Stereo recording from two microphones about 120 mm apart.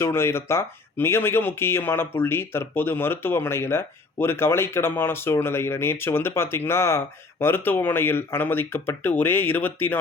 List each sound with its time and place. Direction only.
0.0 s speech: 20° left (ahead or behind)